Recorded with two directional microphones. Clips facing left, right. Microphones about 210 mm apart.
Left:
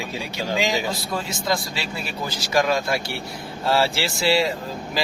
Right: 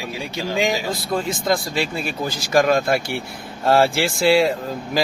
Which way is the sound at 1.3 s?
50° right (ahead or behind).